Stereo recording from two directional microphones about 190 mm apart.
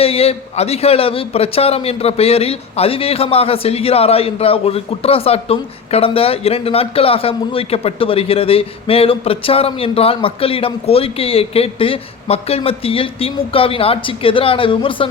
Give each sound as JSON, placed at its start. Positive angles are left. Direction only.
{"t": 0.0, "sound": "a man's voice", "side_deg": 30}